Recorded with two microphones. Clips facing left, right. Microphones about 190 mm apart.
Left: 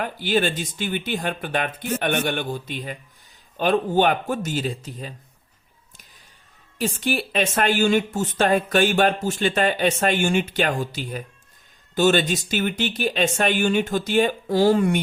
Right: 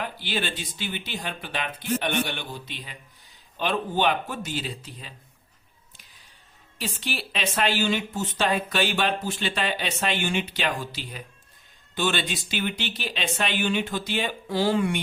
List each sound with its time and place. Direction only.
0.0 s speech: 45° left (ahead or behind)
6.7 s speech: 45° left (ahead or behind)